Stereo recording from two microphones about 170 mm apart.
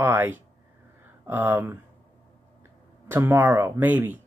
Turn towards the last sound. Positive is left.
turn(degrees=-10)  # may be behind; listen again after turning